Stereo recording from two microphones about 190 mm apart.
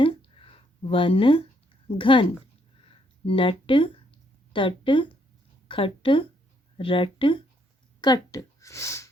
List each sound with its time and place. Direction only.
0.0 s a sound: 30° left (ahead or behind)
2.0 s speech: 25° left (ahead or behind)
3.2 s a woman's voice: 25° left (ahead or behind)